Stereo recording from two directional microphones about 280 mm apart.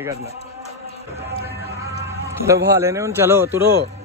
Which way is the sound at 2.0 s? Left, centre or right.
Centre.